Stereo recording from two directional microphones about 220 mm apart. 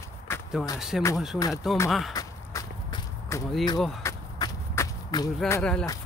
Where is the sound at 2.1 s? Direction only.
15° left (ahead or behind).